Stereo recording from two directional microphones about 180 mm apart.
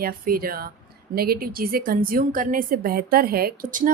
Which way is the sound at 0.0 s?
55° right (ahead or behind).